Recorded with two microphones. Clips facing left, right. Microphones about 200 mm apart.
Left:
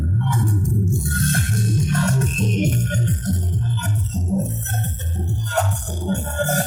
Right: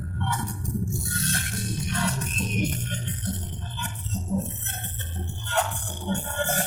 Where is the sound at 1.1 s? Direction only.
50° left (ahead or behind).